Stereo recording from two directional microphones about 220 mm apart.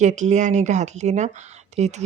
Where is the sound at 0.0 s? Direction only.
35° right (ahead or behind).